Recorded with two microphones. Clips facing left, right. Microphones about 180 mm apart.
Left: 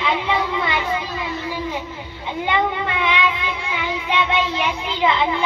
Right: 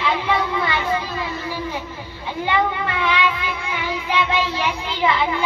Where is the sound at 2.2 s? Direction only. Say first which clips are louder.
Even; 15° left (ahead or behind).